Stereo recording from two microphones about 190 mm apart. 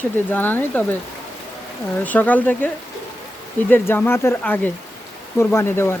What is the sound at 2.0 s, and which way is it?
Speech, 10° left (ahead or behind).